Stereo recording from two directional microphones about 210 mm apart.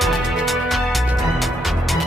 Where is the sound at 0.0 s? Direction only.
Centre (ahead or behind).